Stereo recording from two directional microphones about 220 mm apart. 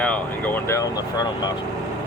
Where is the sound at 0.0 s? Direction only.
5° left (ahead or behind).